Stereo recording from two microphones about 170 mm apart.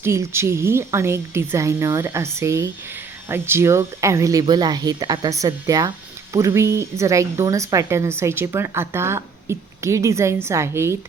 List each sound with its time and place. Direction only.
0.0 s speech: 15° right (ahead or behind)